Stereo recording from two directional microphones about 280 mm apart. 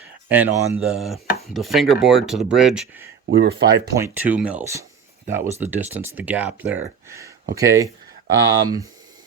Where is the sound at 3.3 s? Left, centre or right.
Right.